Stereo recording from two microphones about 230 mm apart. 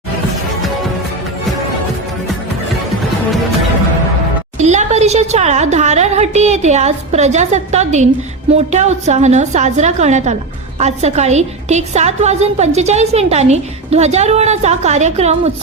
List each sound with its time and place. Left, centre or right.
4.5 s a woman's voice: right